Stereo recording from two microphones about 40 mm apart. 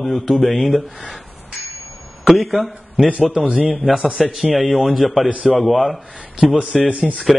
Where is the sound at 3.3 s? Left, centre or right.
Right.